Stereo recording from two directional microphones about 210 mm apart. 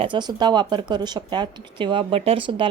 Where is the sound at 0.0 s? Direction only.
20° right (ahead or behind).